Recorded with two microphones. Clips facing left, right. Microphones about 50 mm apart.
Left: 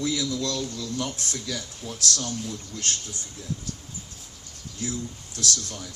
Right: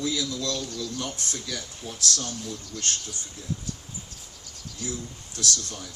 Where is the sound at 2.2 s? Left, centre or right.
Left.